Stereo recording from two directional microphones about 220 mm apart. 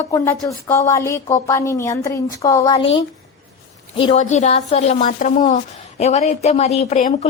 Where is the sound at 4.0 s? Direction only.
30° left (ahead or behind).